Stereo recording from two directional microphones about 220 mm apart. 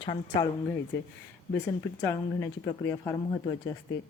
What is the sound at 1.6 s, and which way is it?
Speech, 10° left (ahead or behind).